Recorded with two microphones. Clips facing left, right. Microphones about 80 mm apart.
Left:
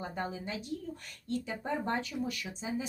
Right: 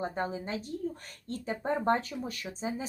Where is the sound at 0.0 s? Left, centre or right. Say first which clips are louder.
Right 4 dB; right.